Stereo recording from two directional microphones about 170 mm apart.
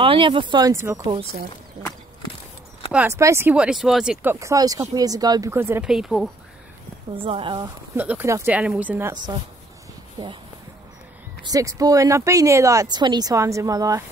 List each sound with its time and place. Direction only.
0.0 s speech: 30° right (ahead or behind)
2.9 s speech: 10° right (ahead or behind)
5.9 s speech: centre (ahead or behind)
7.2 s speech: 30° right (ahead or behind)
7.9 s speech: 10° right (ahead or behind)
9.1 s speech: 25° right (ahead or behind)
11.5 s speech: 20° right (ahead or behind)